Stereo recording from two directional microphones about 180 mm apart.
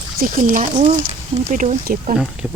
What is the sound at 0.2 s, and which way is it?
Speech, 50° right (ahead or behind).